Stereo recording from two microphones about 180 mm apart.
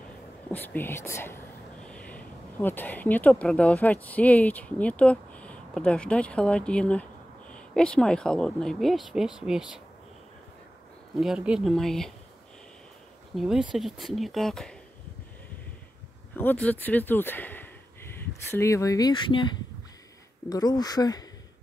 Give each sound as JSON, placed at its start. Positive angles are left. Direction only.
{"t": 0.5, "sound": "speech", "side_deg": 10}
{"t": 11.1, "sound": "speech", "side_deg": -5}
{"t": 13.4, "sound": "speech", "side_deg": -5}
{"t": 16.3, "sound": "speech", "side_deg": 10}